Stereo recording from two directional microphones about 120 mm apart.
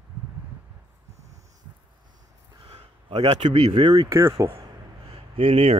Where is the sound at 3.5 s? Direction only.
45° right (ahead or behind).